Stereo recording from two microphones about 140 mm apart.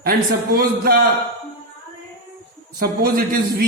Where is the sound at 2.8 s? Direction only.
90° right.